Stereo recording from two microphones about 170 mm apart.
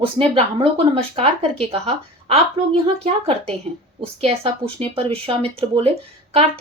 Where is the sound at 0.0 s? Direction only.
35° right (ahead or behind).